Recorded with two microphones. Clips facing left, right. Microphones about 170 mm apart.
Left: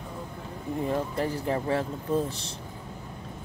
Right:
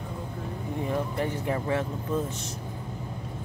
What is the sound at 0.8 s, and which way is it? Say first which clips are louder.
Speech: left 1 dB; 35° left (ahead or behind).